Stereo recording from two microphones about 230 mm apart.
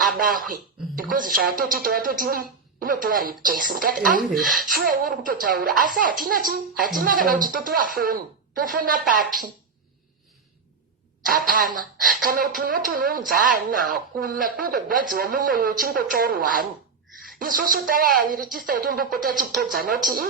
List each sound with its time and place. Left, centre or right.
0.2 s speech: right
11.3 s speech: right